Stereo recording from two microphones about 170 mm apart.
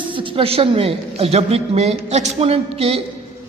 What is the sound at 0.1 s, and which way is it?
A man's voice, 30° right (ahead or behind).